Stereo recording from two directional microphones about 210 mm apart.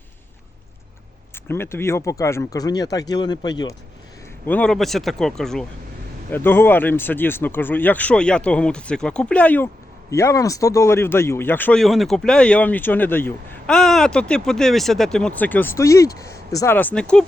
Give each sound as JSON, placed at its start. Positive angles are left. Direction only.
{"t": 1.5, "sound": "speech", "side_deg": 10}
{"t": 4.4, "sound": "speech", "side_deg": 5}